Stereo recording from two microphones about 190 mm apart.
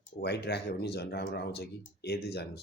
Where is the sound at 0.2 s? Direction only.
60° left (ahead or behind).